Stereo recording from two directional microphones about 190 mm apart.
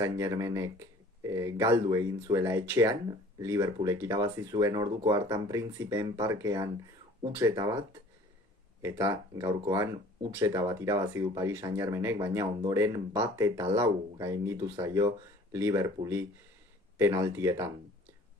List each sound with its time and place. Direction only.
0.0 s speech: 15° right (ahead or behind)